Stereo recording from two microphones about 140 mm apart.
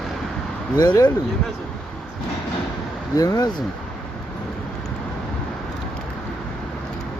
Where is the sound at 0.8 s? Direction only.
30° left (ahead or behind).